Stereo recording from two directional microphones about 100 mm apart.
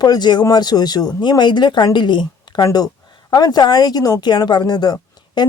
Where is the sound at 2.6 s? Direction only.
35° left (ahead or behind).